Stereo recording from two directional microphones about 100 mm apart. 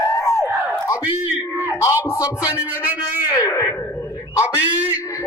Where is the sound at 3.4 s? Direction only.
35° left (ahead or behind).